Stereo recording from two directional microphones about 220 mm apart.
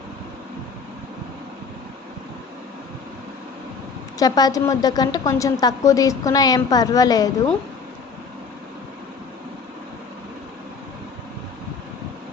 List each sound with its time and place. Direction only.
4.2 s a woman's voice: 15° left (ahead or behind)